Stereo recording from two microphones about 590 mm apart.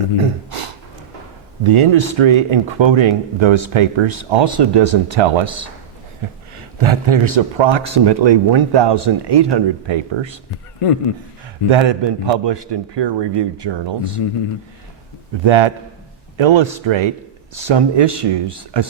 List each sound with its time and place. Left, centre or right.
1.6 s speech: right
10.8 s speech: left
11.7 s speech: right
15.4 s speech: right